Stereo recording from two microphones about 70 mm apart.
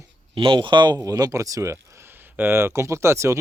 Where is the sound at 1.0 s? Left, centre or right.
Right.